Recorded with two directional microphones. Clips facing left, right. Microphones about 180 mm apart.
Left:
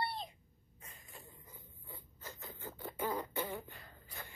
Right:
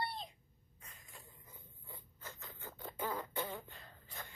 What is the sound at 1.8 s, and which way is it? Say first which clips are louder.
Rodents: left 2 dB; 10° left (ahead or behind).